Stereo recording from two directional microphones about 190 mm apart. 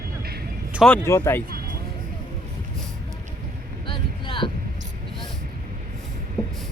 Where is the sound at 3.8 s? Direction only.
25° left (ahead or behind).